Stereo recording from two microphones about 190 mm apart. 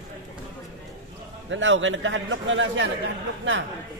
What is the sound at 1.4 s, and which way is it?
A man's voice, 75° right (ahead or behind).